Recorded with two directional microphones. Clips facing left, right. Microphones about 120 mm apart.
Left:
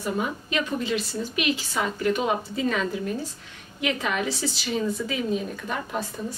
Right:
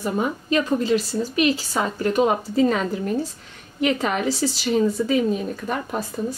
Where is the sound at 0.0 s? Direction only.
40° right (ahead or behind).